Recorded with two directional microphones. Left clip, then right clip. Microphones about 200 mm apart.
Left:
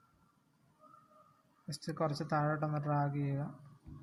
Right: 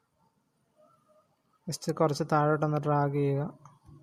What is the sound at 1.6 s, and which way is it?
Speech, 50° right (ahead or behind).